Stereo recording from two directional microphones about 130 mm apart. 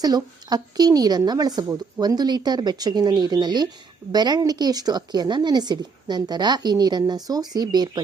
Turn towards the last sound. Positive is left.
turn(degrees=-30)  # may be behind; listen again after turning